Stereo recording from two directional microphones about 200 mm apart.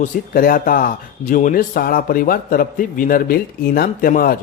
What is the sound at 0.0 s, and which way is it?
Speech, 45° left (ahead or behind).